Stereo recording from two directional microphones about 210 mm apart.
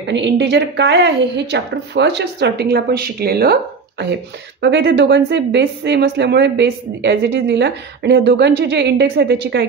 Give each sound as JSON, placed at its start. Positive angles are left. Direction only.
{"t": 0.0, "sound": "a woman's voice", "side_deg": -60}